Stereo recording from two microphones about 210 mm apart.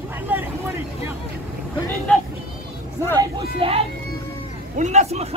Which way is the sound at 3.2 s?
25° right (ahead or behind).